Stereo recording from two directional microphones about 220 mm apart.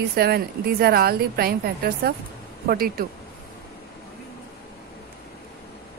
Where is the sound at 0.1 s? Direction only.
45° right (ahead or behind).